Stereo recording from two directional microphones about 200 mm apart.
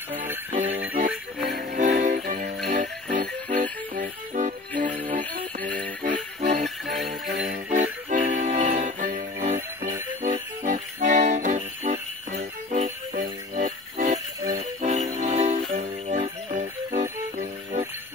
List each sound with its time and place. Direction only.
0.6 s music: 10° right (ahead or behind)
1.5 s jingle bell: 40° right (ahead or behind)
2.7 s music: 35° right (ahead or behind)
6.0 s jingle bell: 40° right (ahead or behind)
6.9 s music: centre (ahead or behind)
8.1 s music: 40° right (ahead or behind)
15.1 s jingle bell: 35° right (ahead or behind)